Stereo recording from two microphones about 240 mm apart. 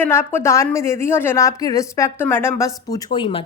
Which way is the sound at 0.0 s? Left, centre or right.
Centre.